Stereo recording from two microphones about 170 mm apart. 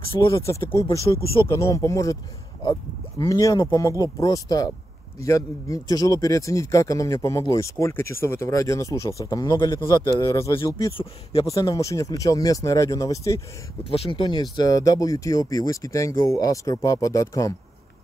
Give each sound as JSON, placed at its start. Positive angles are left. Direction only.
{"t": 0.3, "sound": "a man's voice", "side_deg": 15}
{"t": 11.4, "sound": "a man's voice", "side_deg": 20}
{"t": 13.8, "sound": "a man's voice", "side_deg": 35}